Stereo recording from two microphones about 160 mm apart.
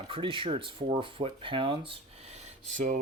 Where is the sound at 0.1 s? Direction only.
30° right (ahead or behind).